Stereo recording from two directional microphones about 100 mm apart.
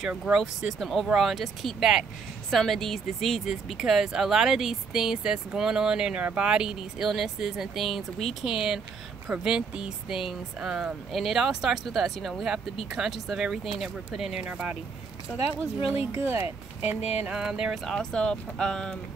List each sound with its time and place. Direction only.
0.2 s speech: 5° right (ahead or behind)
13.0 s a sound: 5° right (ahead or behind)
13.3 s speech: 5° right (ahead or behind)
16.2 s speech: 20° right (ahead or behind)
17.2 s a sound: 10° right (ahead or behind)
17.8 s speech: 5° left (ahead or behind)